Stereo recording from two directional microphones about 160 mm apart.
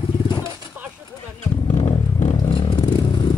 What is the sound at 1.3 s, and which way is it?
Vehicle, 45° left (ahead or behind).